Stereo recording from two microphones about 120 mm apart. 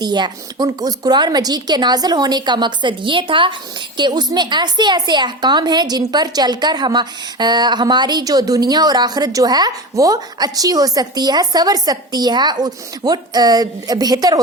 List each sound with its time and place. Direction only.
0.0 s speech: 35° right (ahead or behind)